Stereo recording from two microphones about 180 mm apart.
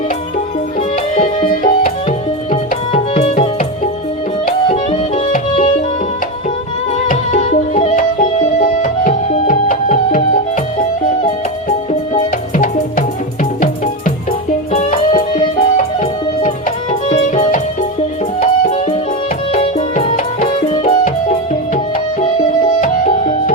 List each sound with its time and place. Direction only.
1.6 s tabla: 40° left (ahead or behind)
4.7 s music: 30° left (ahead or behind)
7.1 s music: 40° left (ahead or behind)
12.1 s music: 45° left (ahead or behind)
14.7 s music: 45° left (ahead or behind)
19.5 s music: 35° left (ahead or behind)
22.8 s music: 50° left (ahead or behind)